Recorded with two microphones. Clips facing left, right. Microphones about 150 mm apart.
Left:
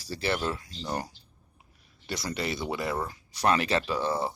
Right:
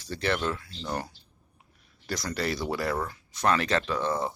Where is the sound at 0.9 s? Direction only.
15° left (ahead or behind).